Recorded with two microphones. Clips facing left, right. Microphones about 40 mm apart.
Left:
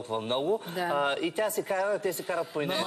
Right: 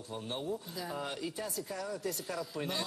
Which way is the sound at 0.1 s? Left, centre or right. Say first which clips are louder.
Left 10 dB; left.